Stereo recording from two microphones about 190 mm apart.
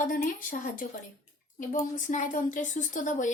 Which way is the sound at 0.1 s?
45° left (ahead or behind).